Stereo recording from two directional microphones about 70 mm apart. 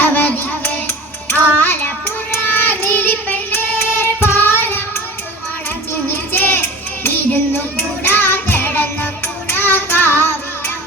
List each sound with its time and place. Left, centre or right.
0.0 s child singing: left
8.0 s music: left